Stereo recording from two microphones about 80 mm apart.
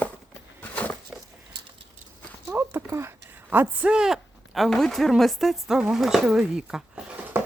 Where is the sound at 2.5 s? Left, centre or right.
Right.